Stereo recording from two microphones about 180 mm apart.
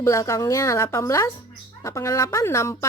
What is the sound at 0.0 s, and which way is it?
A woman's voice, 15° left (ahead or behind).